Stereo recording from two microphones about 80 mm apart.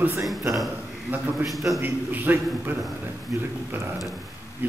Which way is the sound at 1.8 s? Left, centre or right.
Right.